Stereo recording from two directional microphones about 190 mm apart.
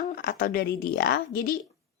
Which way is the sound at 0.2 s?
45° left (ahead or behind).